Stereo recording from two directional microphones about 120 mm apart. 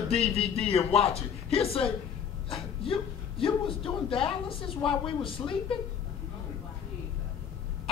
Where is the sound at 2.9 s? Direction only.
50° left (ahead or behind).